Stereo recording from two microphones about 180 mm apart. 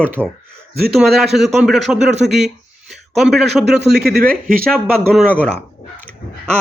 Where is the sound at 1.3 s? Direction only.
Centre (ahead or behind).